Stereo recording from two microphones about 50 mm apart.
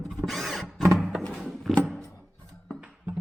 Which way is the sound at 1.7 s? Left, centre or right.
Centre.